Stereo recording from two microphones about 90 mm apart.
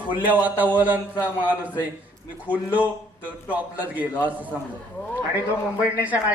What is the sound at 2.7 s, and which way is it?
A man's voice, 15° right (ahead or behind).